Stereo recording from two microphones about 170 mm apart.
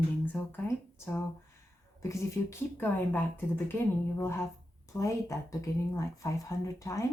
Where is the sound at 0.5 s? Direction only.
15° left (ahead or behind).